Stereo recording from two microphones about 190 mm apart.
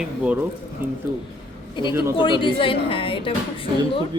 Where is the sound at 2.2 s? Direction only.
25° left (ahead or behind).